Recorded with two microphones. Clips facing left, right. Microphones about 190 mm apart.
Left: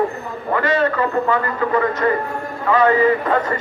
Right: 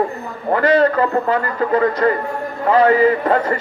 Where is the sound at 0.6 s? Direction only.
35° right (ahead or behind).